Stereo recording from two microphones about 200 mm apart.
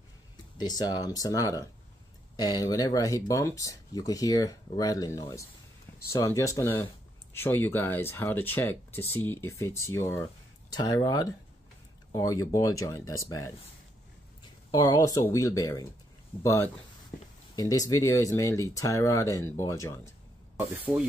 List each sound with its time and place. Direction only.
0.6 s speech: 20° left (ahead or behind)
14.7 s speech: 20° left (ahead or behind)